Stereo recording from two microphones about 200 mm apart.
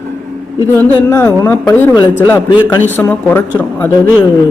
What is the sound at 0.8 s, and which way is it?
Speech, 15° left (ahead or behind).